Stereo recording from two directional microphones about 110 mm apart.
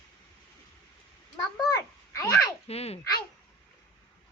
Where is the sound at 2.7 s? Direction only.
70° left (ahead or behind).